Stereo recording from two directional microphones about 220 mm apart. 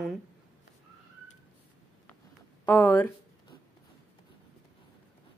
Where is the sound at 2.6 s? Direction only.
5° left (ahead or behind).